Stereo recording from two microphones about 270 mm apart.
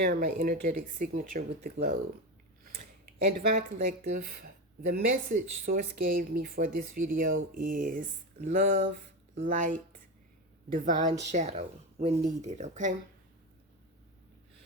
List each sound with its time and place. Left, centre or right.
0.0 s speech: right
3.4 s speech: right
7.1 s speech: right